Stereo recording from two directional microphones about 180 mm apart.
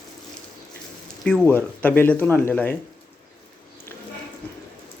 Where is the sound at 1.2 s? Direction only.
5° left (ahead or behind).